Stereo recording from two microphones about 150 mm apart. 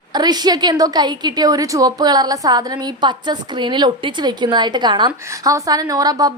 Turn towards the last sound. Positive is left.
turn(degrees=-25)  # may be behind; listen again after turning